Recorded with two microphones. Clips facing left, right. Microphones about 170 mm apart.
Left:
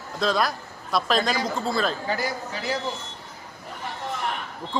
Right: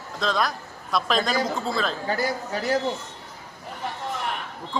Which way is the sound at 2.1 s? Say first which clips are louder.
Right 2 dB; 45° right (ahead or behind).